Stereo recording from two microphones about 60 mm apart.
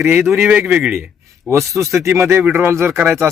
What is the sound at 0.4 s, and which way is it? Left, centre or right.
Speech, right.